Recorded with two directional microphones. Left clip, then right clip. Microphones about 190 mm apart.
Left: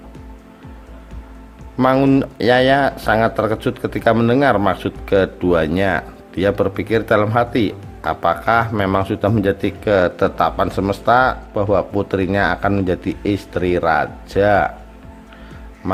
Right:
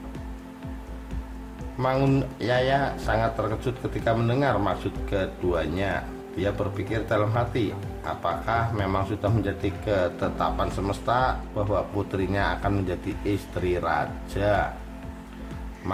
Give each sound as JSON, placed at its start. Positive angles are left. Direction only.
{"t": 1.8, "sound": "a man's voice", "side_deg": 45}